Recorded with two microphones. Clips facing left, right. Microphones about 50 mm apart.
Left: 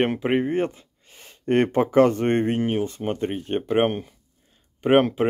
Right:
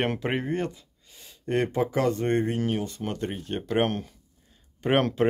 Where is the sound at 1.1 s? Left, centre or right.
Left.